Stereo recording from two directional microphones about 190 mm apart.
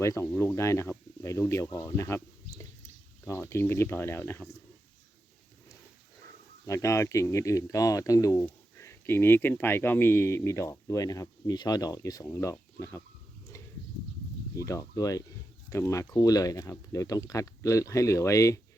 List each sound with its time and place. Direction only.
0.0 s speech: 15° left (ahead or behind)
6.7 s speech: 15° left (ahead or behind)
14.5 s speech: 15° left (ahead or behind)